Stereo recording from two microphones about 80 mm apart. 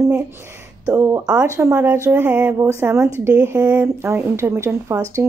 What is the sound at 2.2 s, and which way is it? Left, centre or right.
Speech, right.